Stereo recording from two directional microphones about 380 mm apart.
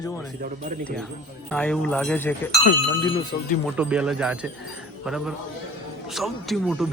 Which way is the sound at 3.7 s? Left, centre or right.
Centre.